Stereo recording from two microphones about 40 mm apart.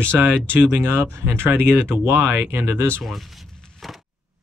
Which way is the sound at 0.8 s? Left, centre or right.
Right.